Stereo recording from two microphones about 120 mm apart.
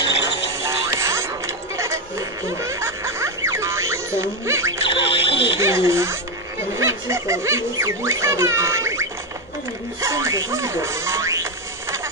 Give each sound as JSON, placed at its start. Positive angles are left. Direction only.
{"t": 0.7, "sound": "music", "side_deg": -25}
{"t": 2.6, "sound": "music", "side_deg": -25}
{"t": 4.8, "sound": "music", "side_deg": 45}
{"t": 5.6, "sound": "speech", "side_deg": -25}
{"t": 10.0, "sound": "speech", "side_deg": -25}